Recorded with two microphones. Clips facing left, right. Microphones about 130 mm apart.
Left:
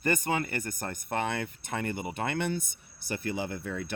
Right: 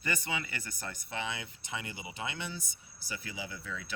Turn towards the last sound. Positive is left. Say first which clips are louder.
# left 8 dB
turn(degrees=55)  # may be behind; listen again after turning